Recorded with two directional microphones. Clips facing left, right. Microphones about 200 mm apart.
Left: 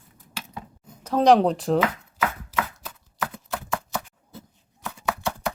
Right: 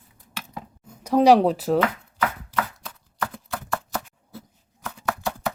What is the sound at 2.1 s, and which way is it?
Chopping, 5° left (ahead or behind).